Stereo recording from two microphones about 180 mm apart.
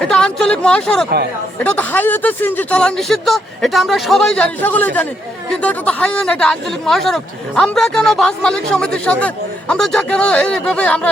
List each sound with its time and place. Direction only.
0.1 s speech: 5° left (ahead or behind)